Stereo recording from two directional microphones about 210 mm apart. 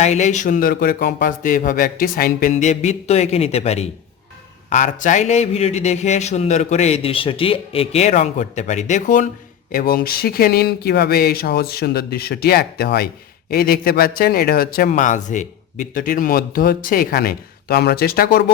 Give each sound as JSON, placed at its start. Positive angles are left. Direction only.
{"t": 0.0, "sound": "a man's voice", "side_deg": 35}